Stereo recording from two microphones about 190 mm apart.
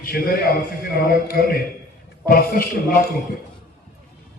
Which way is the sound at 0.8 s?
50° left (ahead or behind).